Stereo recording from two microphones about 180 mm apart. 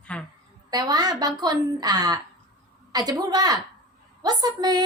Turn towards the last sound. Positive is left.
turn(degrees=-20)  # may be behind; listen again after turning